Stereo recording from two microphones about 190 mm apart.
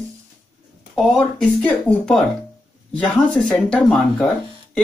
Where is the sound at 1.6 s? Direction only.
5° left (ahead or behind).